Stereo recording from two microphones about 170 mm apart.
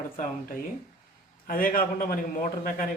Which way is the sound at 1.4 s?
55° left (ahead or behind).